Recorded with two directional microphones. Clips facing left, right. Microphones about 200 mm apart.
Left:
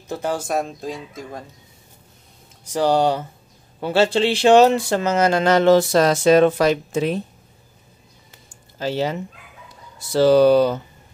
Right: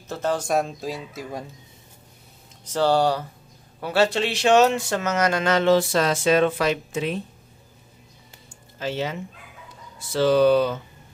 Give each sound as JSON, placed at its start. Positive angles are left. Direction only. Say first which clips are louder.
{"t": 0.1, "sound": "speech", "louder": "even", "side_deg": 10}
{"t": 2.6, "sound": "speech", "louder": "left 2 dB", "side_deg": 15}
{"t": 8.7, "sound": "speech", "louder": "left 5 dB", "side_deg": 35}